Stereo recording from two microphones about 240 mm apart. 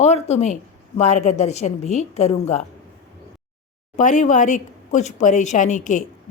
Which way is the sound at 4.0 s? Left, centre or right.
Left.